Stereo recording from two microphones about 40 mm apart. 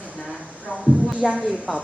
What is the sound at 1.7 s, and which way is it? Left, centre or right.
Speech, centre.